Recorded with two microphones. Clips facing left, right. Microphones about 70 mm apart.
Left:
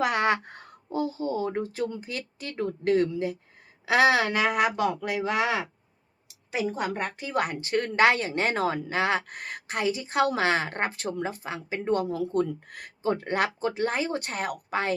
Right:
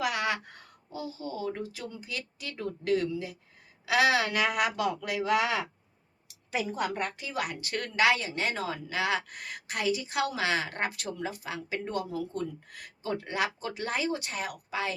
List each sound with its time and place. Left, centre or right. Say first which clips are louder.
0.0 s a sound: left 6 dB; left
3.1 s speech: left 6 dB; left
6.7 s speech: left 2 dB; left
12.0 s speech: left 7 dB; left
13.6 s speech: left 5 dB; left
14.2 s speech: left 5 dB; left